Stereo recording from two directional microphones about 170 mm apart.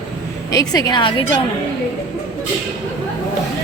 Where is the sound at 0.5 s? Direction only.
20° left (ahead or behind).